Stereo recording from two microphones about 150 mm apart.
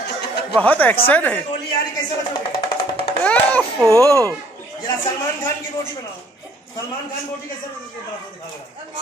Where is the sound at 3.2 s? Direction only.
10° left (ahead or behind).